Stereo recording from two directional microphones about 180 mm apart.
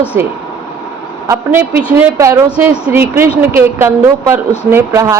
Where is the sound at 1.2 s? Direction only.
10° right (ahead or behind).